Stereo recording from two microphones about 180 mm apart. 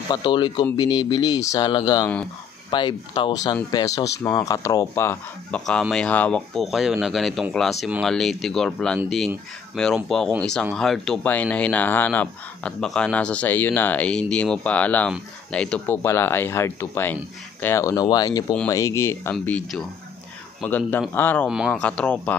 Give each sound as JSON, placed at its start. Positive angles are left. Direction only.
{"t": 0.1, "sound": "speech", "side_deg": 25}
{"t": 5.7, "sound": "speech", "side_deg": 5}
{"t": 19.3, "sound": "speech", "side_deg": 5}
{"t": 21.5, "sound": "speech", "side_deg": -5}